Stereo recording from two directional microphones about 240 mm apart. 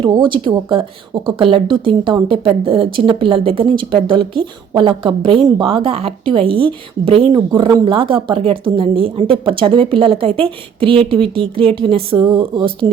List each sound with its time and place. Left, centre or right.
0.0 s speech: centre